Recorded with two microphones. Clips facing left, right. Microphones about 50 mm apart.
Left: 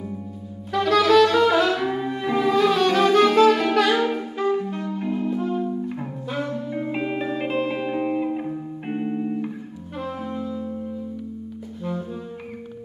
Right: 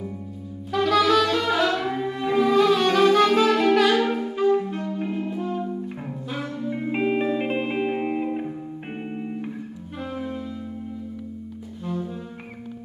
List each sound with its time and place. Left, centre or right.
0.7 s saxophone: centre
1.4 s music: centre
6.9 s music: right
9.9 s music: centre